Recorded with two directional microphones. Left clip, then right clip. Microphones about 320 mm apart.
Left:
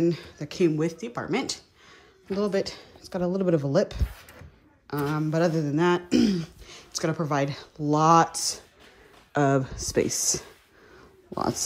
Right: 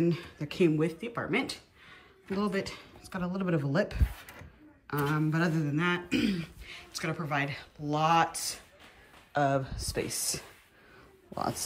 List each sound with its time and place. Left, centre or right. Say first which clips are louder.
0.0 s speech: left 5 dB; centre
4.8 s a sound: left 2 dB; centre
9.3 s speech: left 4 dB; left